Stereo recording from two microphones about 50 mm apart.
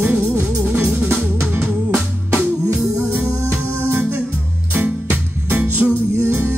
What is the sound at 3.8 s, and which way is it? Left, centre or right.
Music, right.